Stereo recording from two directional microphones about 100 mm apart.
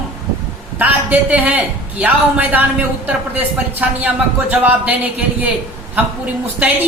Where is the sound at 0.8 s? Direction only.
15° right (ahead or behind).